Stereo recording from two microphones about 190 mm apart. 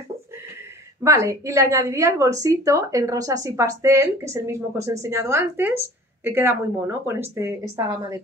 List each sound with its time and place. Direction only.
1.0 s a woman's voice: 15° right (ahead or behind)